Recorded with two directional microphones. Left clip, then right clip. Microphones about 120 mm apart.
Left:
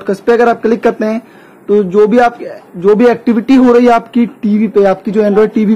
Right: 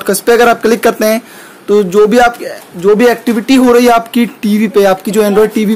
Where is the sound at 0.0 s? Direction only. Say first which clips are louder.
Right 2 dB; 15° right (ahead or behind); by 3.6 s 10° left (ahead or behind).